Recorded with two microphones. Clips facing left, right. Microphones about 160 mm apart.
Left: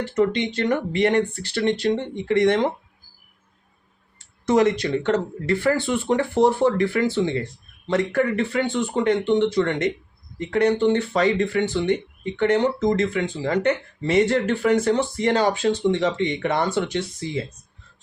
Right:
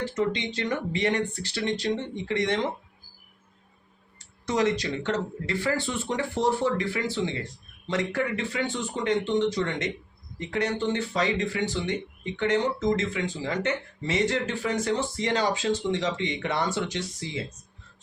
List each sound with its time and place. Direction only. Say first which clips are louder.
0.2 s speech: left 8 dB; 60° left (ahead or behind)
4.4 s speech: left 6 dB; 55° left (ahead or behind)